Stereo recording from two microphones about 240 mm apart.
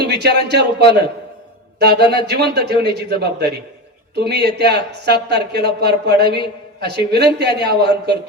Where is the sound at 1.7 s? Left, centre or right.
Right.